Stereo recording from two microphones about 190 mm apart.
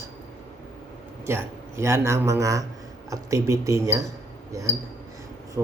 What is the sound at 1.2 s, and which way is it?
A man's voice, 15° right (ahead or behind).